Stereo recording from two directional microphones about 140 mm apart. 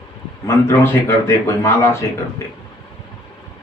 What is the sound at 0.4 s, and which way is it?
A man's voice, 20° left (ahead or behind).